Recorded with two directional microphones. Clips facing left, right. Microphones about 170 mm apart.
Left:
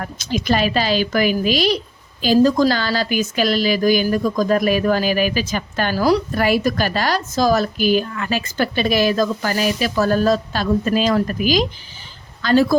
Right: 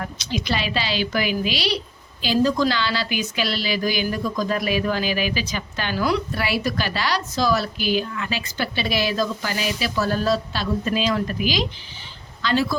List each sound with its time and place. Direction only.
0.0 s a woman's voice: 50° left (ahead or behind)